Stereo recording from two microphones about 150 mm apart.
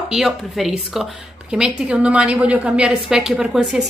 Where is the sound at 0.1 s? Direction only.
Centre (ahead or behind).